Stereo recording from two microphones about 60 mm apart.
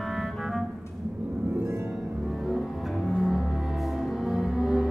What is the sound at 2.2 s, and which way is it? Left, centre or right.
Music, centre.